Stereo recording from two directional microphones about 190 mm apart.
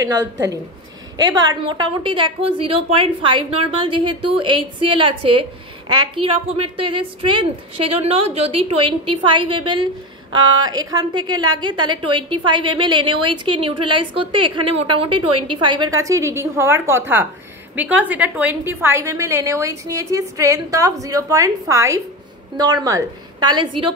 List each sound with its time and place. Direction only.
0.0 s a woman's voice: 20° right (ahead or behind)